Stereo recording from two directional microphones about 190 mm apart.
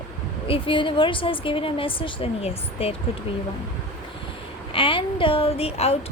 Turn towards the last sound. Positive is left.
turn(degrees=30)  # may be behind; listen again after turning